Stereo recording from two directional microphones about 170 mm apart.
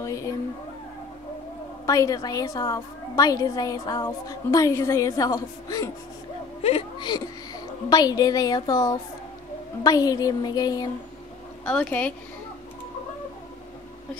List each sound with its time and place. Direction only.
0.0 s a woman's voice: 15° left (ahead or behind)
1.9 s a woman's voice: 20° left (ahead or behind)
6.6 s a woman's voice: 30° left (ahead or behind)
11.6 s speech: 5° left (ahead or behind)